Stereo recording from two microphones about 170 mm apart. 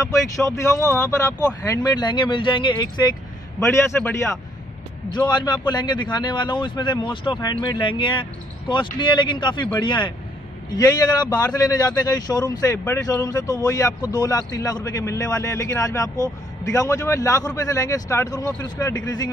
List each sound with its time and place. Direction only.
0.4 s a man's voice: 15° left (ahead or behind)
3.5 s a man's voice: 15° left (ahead or behind)